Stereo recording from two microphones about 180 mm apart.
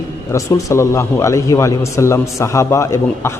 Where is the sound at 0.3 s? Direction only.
15° left (ahead or behind).